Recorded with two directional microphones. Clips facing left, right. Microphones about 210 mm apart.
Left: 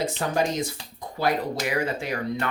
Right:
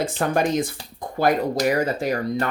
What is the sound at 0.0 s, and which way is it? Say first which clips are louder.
Speech: right 3 dB; 55° right (ahead or behind).